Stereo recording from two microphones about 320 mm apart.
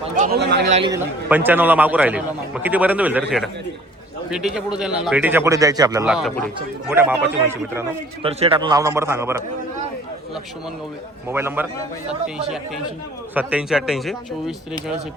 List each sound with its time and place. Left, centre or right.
0.2 s speech: right
0.8 s a man's voice: centre
8.3 s a man's voice: centre
11.3 s a man's voice: centre
13.3 s a man's voice: centre